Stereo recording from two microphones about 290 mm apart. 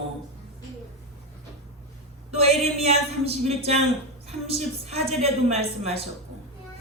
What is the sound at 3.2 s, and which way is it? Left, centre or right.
A woman's voice, right.